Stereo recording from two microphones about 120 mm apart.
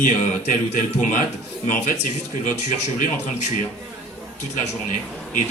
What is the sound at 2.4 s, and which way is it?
Speech, 85° left.